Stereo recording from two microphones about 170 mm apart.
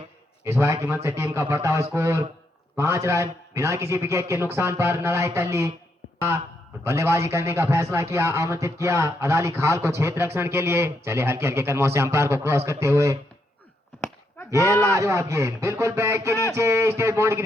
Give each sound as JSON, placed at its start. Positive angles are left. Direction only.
{"t": 0.4, "sound": "speech", "side_deg": -15}
{"t": 14.8, "sound": "speech", "side_deg": -20}